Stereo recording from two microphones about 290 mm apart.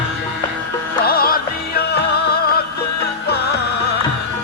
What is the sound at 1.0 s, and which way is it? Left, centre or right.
Music, left.